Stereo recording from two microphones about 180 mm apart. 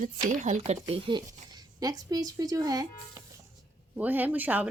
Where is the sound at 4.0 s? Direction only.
10° right (ahead or behind).